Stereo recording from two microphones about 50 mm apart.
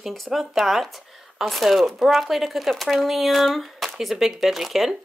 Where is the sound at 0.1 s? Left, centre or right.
Centre.